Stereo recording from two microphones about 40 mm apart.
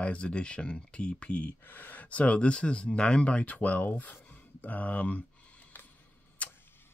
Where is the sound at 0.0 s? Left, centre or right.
Left.